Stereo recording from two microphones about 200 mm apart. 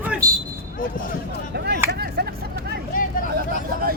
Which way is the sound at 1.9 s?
50° right (ahead or behind).